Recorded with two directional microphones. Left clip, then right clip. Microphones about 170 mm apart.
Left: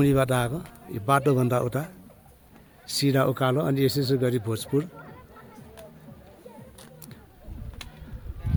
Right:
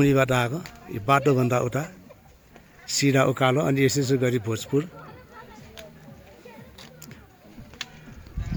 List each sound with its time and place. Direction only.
0.0 s speech: centre (ahead or behind)